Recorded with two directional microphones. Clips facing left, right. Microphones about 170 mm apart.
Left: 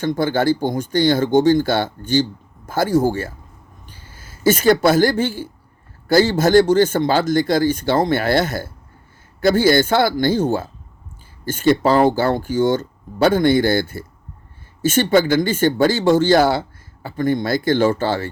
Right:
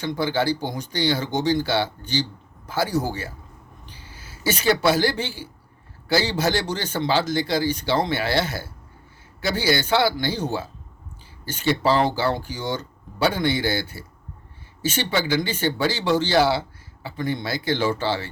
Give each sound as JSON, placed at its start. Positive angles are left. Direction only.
{"t": 0.0, "sound": "speech", "side_deg": 50}